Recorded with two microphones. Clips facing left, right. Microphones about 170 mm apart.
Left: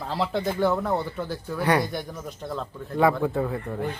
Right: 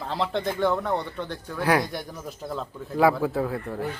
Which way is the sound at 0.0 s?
Centre (ahead or behind).